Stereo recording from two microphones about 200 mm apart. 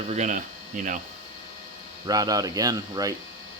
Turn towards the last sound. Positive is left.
turn(degrees=-20)  # may be behind; listen again after turning